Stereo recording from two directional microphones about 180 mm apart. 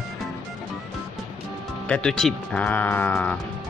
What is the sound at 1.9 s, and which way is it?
Speech, 5° left (ahead or behind).